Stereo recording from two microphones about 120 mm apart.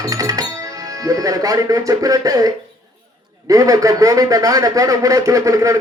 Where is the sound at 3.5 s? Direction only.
30° right (ahead or behind).